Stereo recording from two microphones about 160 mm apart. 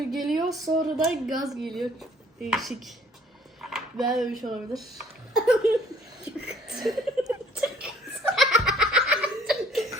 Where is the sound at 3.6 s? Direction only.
5° right (ahead or behind).